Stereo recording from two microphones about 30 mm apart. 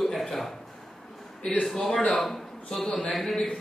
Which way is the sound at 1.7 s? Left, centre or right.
Centre.